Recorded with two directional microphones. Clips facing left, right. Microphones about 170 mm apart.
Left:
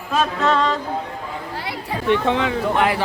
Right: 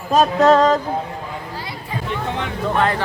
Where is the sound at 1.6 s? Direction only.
80° left.